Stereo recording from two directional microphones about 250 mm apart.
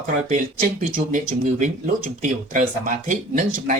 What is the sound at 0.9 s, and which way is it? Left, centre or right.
Speech, right.